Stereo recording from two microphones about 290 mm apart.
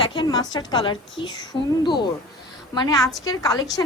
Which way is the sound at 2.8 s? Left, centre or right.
Centre.